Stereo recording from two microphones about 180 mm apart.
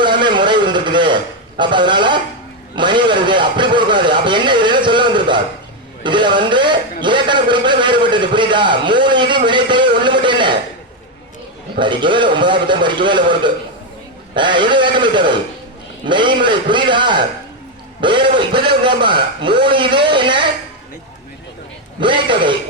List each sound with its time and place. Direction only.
0.0 s a man's voice: 25° right (ahead or behind)
11.8 s a man's voice: 25° right (ahead or behind)
22.0 s a man's voice: 25° right (ahead or behind)